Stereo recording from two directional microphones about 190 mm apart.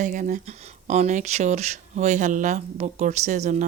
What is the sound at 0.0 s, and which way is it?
Speech, 45° right (ahead or behind).